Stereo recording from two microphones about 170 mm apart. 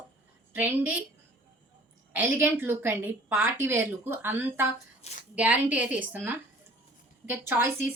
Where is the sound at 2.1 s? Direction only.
10° right (ahead or behind).